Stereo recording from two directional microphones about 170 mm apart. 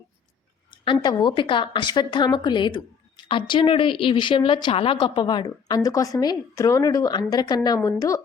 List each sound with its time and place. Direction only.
0.7 s a woman's voice: 25° left (ahead or behind)